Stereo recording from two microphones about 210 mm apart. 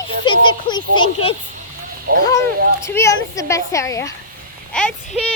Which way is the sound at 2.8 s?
15° left (ahead or behind).